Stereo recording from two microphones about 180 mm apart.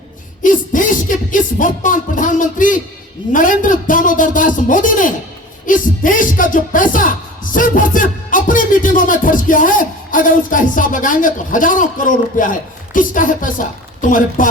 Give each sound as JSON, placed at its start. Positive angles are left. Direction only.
{"t": 0.4, "sound": "music", "side_deg": 45}
{"t": 3.3, "sound": "speech", "side_deg": 50}